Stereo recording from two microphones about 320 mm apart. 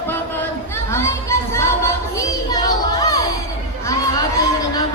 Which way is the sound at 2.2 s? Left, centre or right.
Centre.